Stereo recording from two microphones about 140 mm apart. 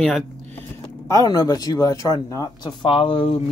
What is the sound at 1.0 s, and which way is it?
Speech, 25° left (ahead or behind).